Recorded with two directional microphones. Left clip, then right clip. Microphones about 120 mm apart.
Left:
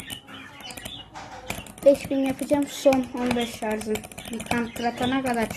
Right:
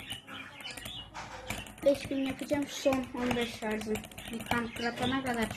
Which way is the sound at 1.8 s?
40° left (ahead or behind).